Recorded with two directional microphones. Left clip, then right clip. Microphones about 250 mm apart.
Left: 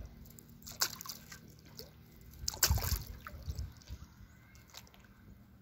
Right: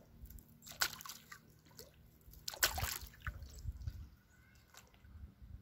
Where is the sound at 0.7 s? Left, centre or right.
Right.